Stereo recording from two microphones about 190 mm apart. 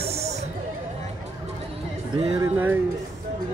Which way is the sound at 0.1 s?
35° right (ahead or behind).